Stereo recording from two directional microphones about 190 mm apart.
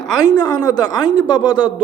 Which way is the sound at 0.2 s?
20° left (ahead or behind).